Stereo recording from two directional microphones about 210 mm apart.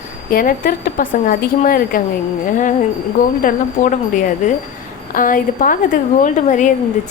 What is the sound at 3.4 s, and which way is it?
A woman's voice, 40° left (ahead or behind).